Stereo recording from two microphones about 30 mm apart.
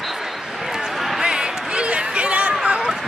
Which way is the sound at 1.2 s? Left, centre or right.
Right.